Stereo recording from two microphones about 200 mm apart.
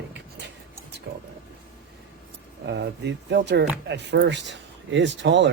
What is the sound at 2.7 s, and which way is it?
Speech, 60° right (ahead or behind).